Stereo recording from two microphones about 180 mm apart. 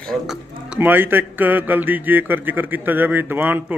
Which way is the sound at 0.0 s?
Centre (ahead or behind).